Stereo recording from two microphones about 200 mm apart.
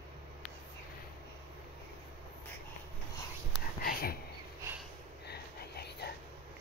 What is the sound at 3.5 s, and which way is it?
Whispering, 50° left (ahead or behind).